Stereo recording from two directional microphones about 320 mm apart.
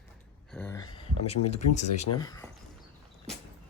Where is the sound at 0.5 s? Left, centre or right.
Centre.